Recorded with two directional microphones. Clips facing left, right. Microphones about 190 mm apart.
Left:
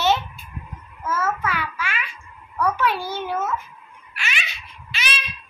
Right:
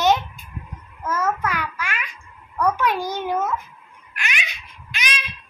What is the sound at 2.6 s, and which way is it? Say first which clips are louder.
Speech: right 1 dB; 15° right (ahead or behind).